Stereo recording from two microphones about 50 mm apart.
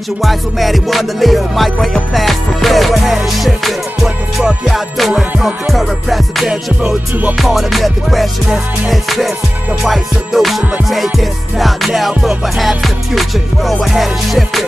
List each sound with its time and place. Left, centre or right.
0.2 s music: centre
6.5 s music: centre
7.3 s music: centre